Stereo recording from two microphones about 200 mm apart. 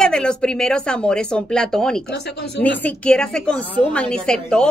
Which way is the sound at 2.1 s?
55° left (ahead or behind).